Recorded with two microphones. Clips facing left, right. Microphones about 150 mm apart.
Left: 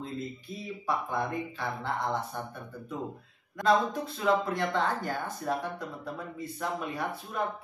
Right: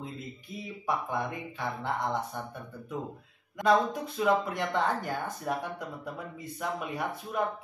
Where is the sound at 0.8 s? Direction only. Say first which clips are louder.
Even; 15° right (ahead or behind).